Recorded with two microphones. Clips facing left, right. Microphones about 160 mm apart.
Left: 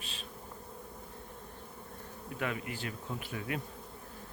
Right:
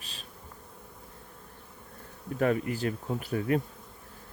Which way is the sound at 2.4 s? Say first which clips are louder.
Right 10 dB; 40° right (ahead or behind).